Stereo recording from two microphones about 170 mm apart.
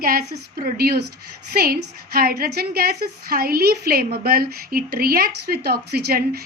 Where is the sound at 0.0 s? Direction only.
60° right (ahead or behind).